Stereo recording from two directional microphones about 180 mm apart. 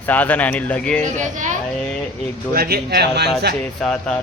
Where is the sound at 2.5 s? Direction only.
60° right (ahead or behind).